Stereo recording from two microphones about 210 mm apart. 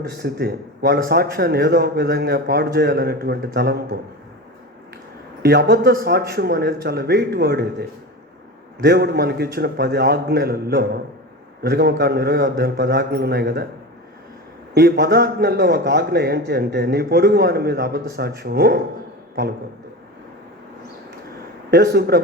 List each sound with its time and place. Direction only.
0.2 s a man's voice: 50° right (ahead or behind)
5.4 s a man's voice: 50° right (ahead or behind)
14.7 s a man's voice: 50° right (ahead or behind)
21.7 s a man's voice: 50° right (ahead or behind)